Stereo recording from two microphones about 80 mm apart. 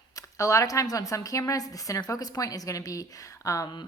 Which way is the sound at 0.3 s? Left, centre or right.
Left.